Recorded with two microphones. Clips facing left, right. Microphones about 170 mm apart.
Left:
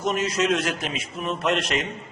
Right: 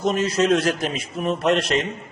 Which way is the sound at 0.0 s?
30° right (ahead or behind).